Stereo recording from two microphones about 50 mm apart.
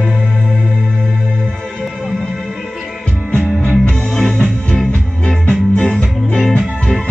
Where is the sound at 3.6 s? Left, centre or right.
Centre.